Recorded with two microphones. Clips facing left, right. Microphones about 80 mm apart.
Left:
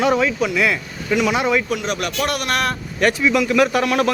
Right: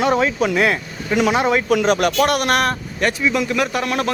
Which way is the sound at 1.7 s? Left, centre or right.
Right.